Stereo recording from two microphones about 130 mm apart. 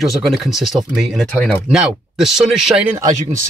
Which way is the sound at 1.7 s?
5° right (ahead or behind).